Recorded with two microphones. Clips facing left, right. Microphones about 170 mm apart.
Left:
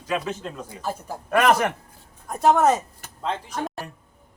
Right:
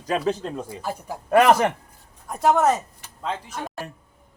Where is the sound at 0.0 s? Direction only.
35° right (ahead or behind).